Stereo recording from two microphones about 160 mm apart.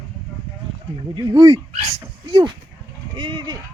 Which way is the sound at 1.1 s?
25° right (ahead or behind).